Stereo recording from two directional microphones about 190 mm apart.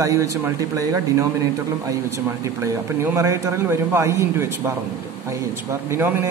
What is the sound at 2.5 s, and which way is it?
Speech, 15° right (ahead or behind).